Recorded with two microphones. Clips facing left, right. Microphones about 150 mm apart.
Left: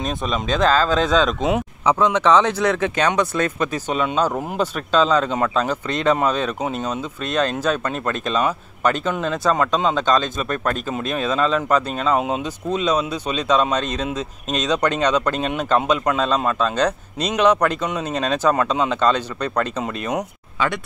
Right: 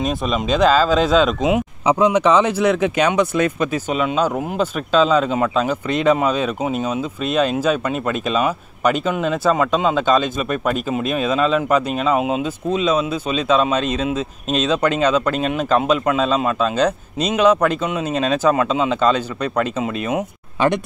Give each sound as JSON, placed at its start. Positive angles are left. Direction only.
{"t": 0.0, "sound": "speech", "side_deg": -5}
{"t": 20.5, "sound": "speech", "side_deg": -20}